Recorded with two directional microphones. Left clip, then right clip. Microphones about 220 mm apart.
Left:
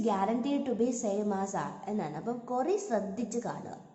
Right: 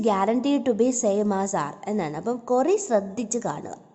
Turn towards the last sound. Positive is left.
turn(degrees=-45)  # may be behind; listen again after turning